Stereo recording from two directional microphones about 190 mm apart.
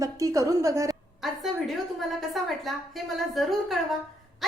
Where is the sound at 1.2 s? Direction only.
Centre (ahead or behind).